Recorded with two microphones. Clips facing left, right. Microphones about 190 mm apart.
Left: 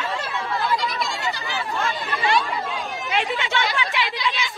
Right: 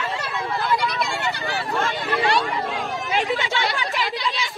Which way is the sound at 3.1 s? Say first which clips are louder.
Right 1 dB; 35° right (ahead or behind).